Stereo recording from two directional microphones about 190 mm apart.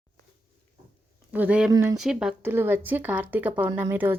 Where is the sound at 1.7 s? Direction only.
20° right (ahead or behind).